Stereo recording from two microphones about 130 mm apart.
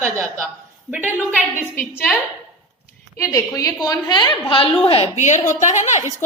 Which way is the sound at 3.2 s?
25° left (ahead or behind).